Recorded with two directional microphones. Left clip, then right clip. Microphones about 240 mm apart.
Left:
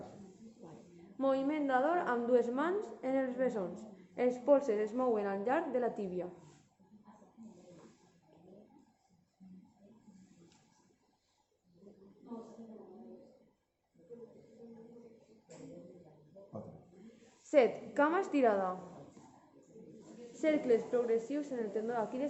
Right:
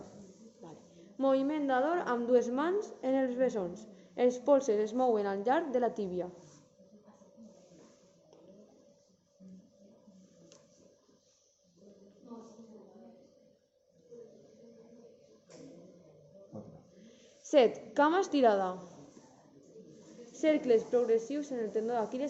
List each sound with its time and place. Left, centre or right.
1.2 s a woman's voice: right
17.5 s a woman's voice: right
20.4 s a woman's voice: right